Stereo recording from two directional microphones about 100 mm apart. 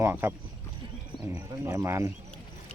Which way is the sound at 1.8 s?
25° right (ahead or behind).